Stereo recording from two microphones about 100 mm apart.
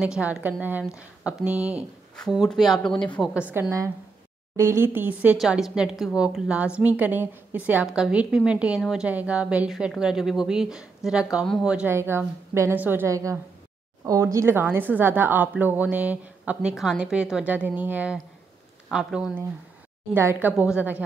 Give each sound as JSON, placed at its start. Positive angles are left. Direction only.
{"t": 0.0, "sound": "a woman's voice", "side_deg": -10}
{"t": 2.4, "sound": "speech", "side_deg": 0}
{"t": 3.6, "sound": "a woman's voice", "side_deg": -25}
{"t": 5.4, "sound": "a woman's voice", "side_deg": -5}
{"t": 11.9, "sound": "a woman's voice", "side_deg": -25}
{"t": 13.1, "sound": "a woman's voice", "side_deg": -30}
{"t": 20.2, "sound": "a woman's voice", "side_deg": -20}